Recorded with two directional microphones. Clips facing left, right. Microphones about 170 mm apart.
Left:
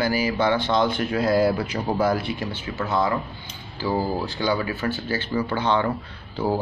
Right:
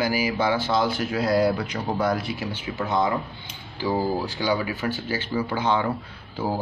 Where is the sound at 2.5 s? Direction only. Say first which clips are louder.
Even; 15° right (ahead or behind).